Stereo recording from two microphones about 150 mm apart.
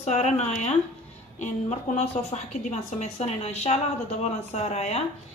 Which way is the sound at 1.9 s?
45° left (ahead or behind).